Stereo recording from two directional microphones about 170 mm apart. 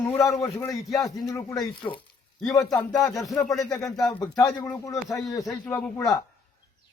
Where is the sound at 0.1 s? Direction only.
15° left (ahead or behind).